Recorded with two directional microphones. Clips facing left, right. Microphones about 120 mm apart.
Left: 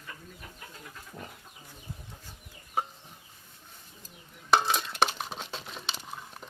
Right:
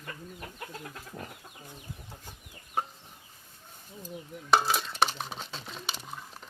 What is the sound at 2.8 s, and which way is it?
Chicken, 5° left (ahead or behind).